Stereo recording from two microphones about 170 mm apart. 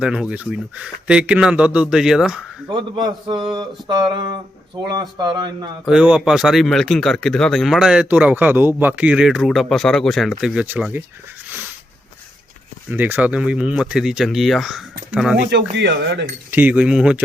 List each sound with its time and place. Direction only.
0.0 s speech: 5° right (ahead or behind)
2.6 s a sound: 30° right (ahead or behind)
5.8 s speech: 5° right (ahead or behind)
11.4 s a sound: 10° right (ahead or behind)
12.9 s speech: 10° right (ahead or behind)
15.4 s speech: 85° right
16.5 s speech: 10° right (ahead or behind)